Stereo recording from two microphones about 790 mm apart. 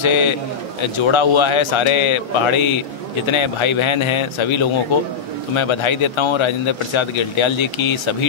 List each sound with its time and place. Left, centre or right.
0.0 s a man's voice: left